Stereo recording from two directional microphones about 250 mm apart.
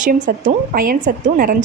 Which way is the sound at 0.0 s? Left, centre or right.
Right.